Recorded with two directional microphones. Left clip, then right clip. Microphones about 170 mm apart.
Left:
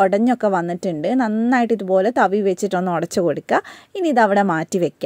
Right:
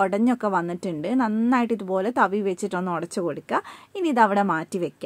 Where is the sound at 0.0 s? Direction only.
25° left (ahead or behind).